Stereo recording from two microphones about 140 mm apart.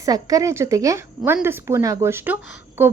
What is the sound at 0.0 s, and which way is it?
Speech, 25° right (ahead or behind).